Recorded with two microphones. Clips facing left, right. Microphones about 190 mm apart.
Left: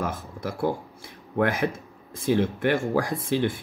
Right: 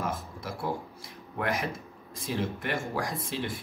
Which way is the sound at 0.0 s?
60° left (ahead or behind).